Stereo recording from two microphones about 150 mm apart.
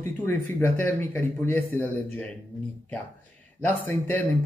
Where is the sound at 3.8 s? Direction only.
15° left (ahead or behind).